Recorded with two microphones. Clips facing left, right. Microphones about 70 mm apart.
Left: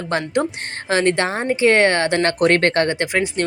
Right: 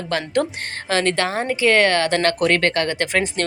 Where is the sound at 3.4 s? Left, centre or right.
Centre.